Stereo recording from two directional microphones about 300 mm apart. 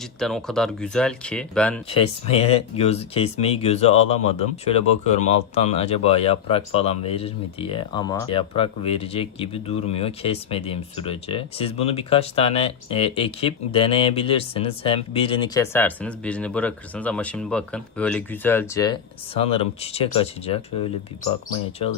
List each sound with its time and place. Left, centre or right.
0.2 s speech: centre
1.9 s speech: centre